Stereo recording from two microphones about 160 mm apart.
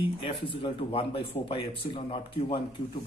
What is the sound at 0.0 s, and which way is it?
Speech, 35° left (ahead or behind).